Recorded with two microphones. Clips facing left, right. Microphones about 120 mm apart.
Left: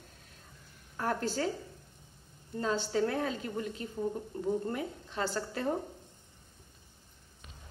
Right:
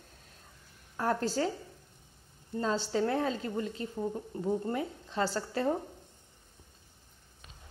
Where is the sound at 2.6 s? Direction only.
30° right (ahead or behind).